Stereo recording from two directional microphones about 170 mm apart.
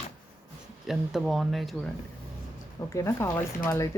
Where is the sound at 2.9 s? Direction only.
15° left (ahead or behind).